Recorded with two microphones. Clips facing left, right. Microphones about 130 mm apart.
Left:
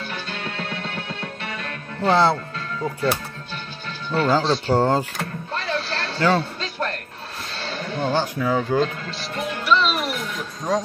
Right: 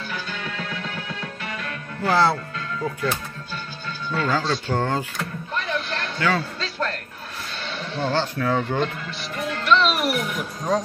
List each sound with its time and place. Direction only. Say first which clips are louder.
0.0 s music: left 1 dB; 25° left (ahead or behind)
2.0 s speech: left 2 dB; 20° left (ahead or behind)
4.1 s speech: left 4 dB; 30° left (ahead or behind)
7.5 s a sound: left 3 dB; 40° left (ahead or behind)
8.0 s speech: left 1 dB; 10° left (ahead or behind)
9.4 s music: right 1 dB; 15° left (ahead or behind)
9.8 s music: right 2 dB; centre (ahead or behind)